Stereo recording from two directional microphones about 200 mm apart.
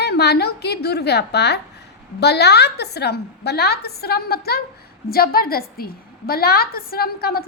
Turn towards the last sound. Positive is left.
turn(degrees=50)  # may be behind; listen again after turning